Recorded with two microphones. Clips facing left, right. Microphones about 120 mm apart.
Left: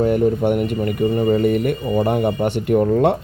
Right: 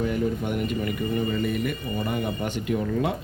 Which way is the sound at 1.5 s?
65° left (ahead or behind).